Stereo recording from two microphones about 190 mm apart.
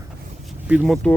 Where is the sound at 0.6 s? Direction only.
5° right (ahead or behind).